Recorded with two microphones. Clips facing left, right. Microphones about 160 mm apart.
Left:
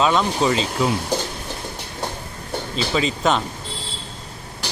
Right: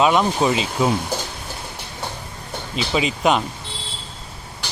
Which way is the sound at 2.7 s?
10° right (ahead or behind).